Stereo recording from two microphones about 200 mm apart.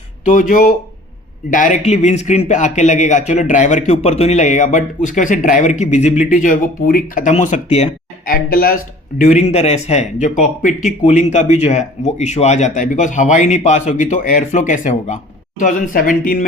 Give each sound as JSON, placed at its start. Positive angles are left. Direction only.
{"t": 0.3, "sound": "speech", "side_deg": 40}